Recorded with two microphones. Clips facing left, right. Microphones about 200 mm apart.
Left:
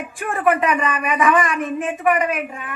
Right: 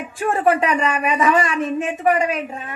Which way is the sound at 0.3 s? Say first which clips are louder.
Right 1 dB; 30° right (ahead or behind).